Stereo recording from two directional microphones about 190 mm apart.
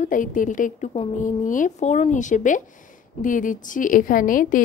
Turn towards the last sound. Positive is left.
turn(degrees=45)  # may be behind; listen again after turning